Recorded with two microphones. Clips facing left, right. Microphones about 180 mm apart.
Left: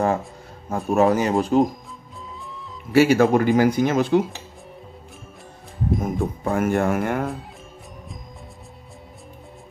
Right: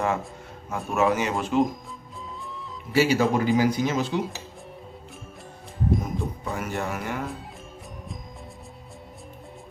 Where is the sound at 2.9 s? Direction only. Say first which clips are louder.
Left 6 dB; 55° left (ahead or behind).